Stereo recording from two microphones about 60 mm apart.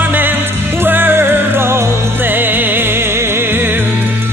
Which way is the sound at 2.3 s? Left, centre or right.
Right.